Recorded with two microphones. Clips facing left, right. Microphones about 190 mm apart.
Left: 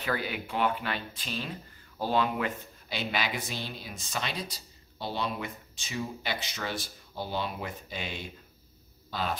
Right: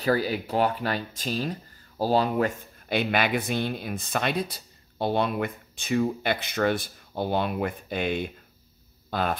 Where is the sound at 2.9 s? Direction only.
55° right (ahead or behind).